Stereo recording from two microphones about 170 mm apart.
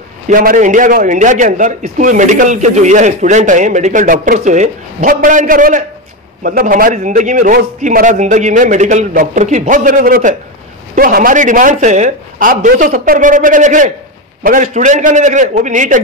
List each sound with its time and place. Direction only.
0.3 s a man's voice: 55° right (ahead or behind)